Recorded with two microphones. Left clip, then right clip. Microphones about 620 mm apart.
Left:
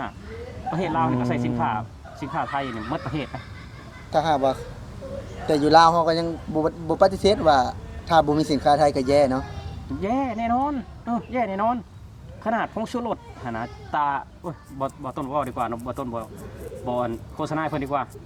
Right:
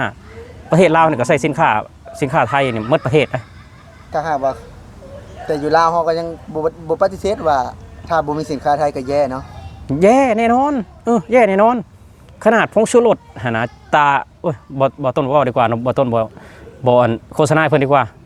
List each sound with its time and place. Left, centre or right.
0.7 s speech: right
4.1 s a man's voice: centre
10.0 s speech: right